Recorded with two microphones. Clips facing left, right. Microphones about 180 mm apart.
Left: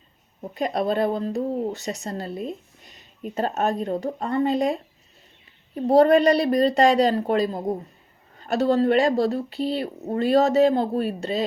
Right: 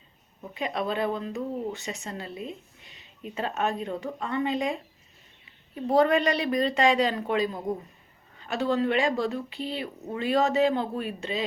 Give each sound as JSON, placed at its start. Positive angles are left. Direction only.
{"t": 0.4, "sound": "speech", "side_deg": 40}